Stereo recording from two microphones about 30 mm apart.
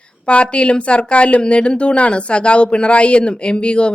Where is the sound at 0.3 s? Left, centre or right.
Left.